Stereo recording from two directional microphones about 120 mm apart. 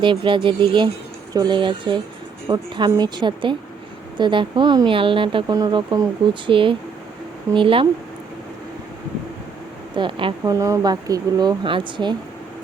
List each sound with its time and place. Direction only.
0.0 s speech: 45° right (ahead or behind)
5.5 s speech: 35° right (ahead or behind)
6.5 s speech: 45° right (ahead or behind)
9.9 s speech: 40° right (ahead or behind)
10.4 s speech: 25° right (ahead or behind); by 12.1 s 40° right (ahead or behind)